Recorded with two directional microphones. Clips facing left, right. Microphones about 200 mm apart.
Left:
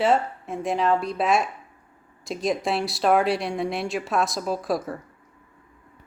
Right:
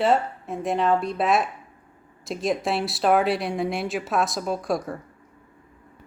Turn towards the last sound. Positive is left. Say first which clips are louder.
# even
turn(degrees=0)  # may be behind; listen again after turning